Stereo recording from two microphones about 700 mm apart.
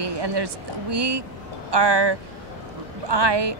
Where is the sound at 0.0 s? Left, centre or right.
Right.